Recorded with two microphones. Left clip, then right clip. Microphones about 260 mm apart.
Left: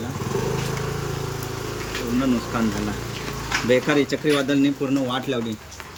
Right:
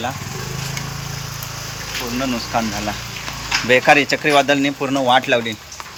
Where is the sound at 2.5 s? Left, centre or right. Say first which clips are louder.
Right 9 dB; centre.